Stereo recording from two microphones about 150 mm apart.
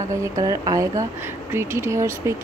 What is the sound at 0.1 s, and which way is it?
Speech, 20° right (ahead or behind).